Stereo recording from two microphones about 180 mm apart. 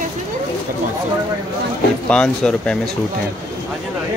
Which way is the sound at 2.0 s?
5° left (ahead or behind).